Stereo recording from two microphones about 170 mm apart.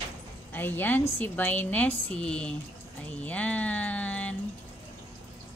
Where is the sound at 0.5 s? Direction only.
10° left (ahead or behind).